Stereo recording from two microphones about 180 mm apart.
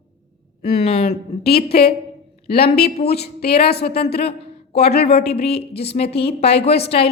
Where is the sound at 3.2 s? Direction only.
60° left (ahead or behind).